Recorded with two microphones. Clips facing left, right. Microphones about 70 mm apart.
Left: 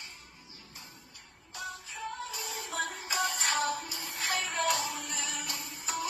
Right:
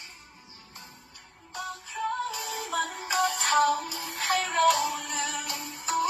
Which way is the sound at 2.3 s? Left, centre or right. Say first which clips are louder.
Right 6 dB; right.